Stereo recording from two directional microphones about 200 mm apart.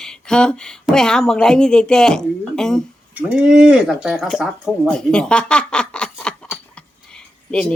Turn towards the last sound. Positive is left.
turn(degrees=5)  # may be behind; listen again after turning